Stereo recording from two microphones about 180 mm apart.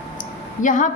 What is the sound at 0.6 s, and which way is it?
Speech, 45° left (ahead or behind).